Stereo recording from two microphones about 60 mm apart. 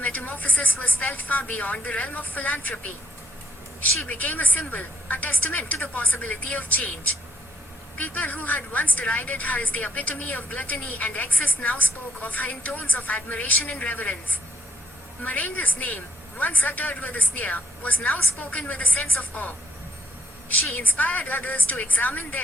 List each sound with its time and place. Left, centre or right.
0.0 s a woman's voice: left
7.9 s a woman's voice: left